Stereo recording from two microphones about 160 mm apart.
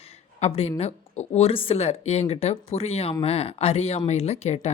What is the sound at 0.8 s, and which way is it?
Speech, 40° left (ahead or behind).